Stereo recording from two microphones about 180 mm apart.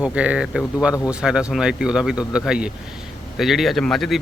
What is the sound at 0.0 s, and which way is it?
Speech, 5° right (ahead or behind).